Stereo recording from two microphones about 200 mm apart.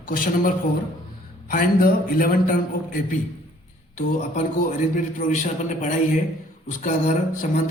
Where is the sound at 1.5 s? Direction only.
45° left (ahead or behind).